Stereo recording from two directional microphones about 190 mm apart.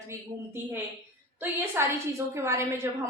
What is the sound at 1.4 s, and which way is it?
A woman's voice, 10° right (ahead or behind).